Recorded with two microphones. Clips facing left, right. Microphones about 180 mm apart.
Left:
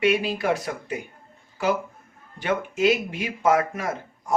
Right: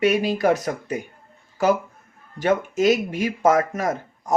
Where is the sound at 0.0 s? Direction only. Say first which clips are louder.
Right 3 dB; 40° right (ahead or behind).